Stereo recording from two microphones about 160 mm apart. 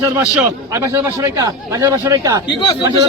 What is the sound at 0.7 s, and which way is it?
A man's voice, 15° right (ahead or behind).